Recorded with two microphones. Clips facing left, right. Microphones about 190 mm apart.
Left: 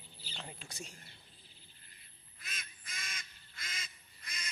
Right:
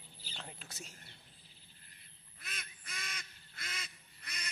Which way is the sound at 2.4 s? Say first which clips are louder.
Right 1 dB; 60° right (ahead or behind).